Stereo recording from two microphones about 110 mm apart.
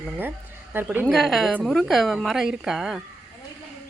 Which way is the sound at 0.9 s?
15° right (ahead or behind).